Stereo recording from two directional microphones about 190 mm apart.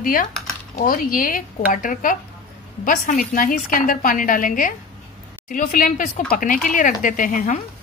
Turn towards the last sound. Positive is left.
turn(degrees=45)  # may be behind; listen again after turning